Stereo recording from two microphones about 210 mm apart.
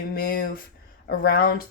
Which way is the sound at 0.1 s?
45° left (ahead or behind).